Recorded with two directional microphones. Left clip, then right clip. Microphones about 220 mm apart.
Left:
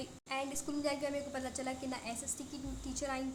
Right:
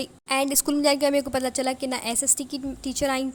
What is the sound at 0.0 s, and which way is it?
A woman's voice, 45° right (ahead or behind).